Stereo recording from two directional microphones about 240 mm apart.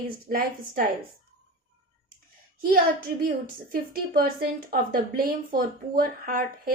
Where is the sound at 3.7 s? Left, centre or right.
Right.